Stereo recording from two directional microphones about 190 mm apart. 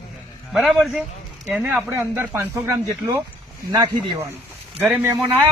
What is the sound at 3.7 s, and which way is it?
Speech, 20° right (ahead or behind).